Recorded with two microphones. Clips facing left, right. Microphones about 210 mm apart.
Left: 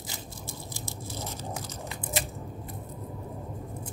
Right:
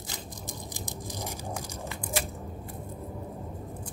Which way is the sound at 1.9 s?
20° left (ahead or behind).